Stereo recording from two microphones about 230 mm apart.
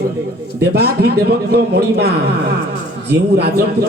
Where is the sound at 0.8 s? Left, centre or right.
Right.